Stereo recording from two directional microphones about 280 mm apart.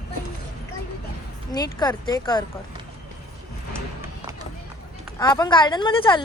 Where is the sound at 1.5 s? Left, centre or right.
Centre.